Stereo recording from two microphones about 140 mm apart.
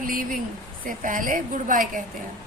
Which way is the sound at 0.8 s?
70° right (ahead or behind).